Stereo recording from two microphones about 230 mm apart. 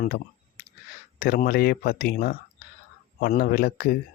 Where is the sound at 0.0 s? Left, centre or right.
Left.